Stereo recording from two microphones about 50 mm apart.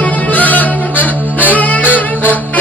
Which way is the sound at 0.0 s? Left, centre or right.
Left.